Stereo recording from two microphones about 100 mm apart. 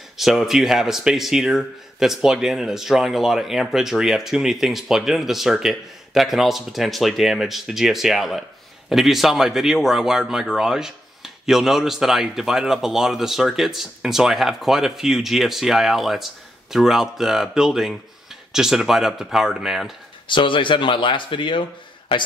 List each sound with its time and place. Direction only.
0.2 s speech: 5° right (ahead or behind)
20.2 s speech: 55° left (ahead or behind)